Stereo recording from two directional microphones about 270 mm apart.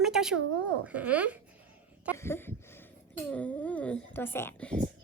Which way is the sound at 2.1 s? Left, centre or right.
Centre.